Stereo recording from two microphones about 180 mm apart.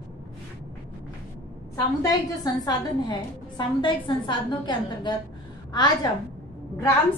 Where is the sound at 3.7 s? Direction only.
25° left (ahead or behind).